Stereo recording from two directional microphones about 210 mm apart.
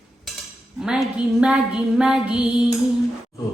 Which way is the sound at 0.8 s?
5° right (ahead or behind).